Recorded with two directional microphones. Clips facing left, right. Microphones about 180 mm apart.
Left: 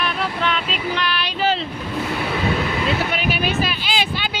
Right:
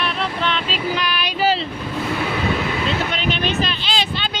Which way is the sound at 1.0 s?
15° right (ahead or behind).